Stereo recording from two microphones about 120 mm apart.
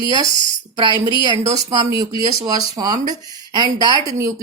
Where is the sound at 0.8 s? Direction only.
40° right (ahead or behind).